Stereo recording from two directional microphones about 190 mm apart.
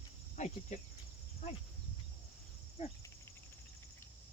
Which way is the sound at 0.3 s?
40° left (ahead or behind).